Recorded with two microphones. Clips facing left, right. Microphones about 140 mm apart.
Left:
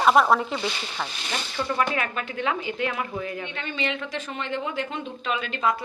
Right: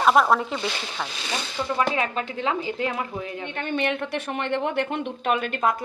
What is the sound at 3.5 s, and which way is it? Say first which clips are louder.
Speech: right 4 dB; 55° right (ahead or behind).